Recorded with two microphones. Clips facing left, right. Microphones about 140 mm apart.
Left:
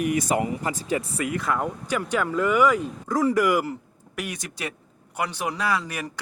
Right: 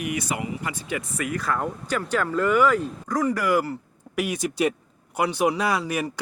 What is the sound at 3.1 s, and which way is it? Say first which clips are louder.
Speech: left 2 dB; 25° left (ahead or behind).